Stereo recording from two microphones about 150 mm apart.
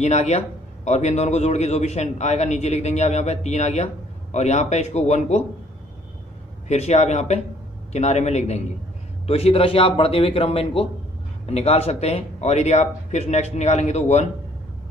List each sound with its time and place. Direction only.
0.0 s a man's voice: 45° left (ahead or behind)
6.7 s a man's voice: 50° left (ahead or behind)